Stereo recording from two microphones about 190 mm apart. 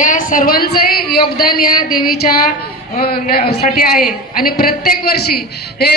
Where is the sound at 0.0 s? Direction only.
45° left (ahead or behind).